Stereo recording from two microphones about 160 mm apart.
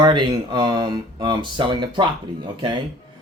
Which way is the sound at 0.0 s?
30° right (ahead or behind).